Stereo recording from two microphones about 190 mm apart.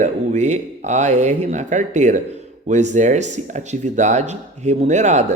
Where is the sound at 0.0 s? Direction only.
40° right (ahead or behind).